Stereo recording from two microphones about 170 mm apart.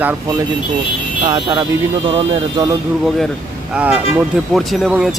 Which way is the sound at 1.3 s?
25° right (ahead or behind).